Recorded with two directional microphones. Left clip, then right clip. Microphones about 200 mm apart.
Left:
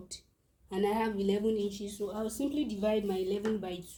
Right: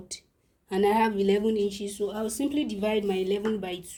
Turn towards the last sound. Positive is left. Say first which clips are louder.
# right 5 dB
turn(degrees=-30)  # may be behind; listen again after turning